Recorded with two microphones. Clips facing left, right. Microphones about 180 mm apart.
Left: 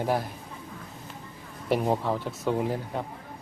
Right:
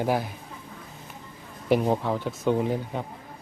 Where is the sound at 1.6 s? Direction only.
Centre (ahead or behind).